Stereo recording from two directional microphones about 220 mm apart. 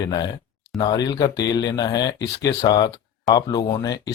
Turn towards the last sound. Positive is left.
turn(degrees=15)  # may be behind; listen again after turning